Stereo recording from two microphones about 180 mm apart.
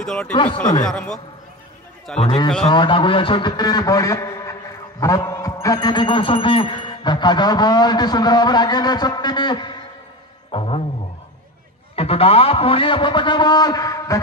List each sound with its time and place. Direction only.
0.0 s a man's voice: 5° left (ahead or behind)
2.1 s a man's voice: 30° left (ahead or behind)
11.9 s speech: 35° left (ahead or behind)